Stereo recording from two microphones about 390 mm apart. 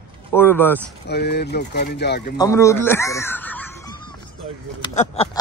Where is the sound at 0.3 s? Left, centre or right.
Centre.